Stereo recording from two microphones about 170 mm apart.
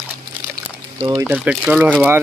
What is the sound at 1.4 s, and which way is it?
Speech, 5° right (ahead or behind).